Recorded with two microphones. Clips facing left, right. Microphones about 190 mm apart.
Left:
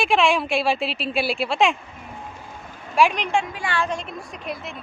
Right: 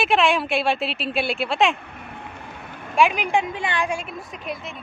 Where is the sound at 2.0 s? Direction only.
65° right (ahead or behind).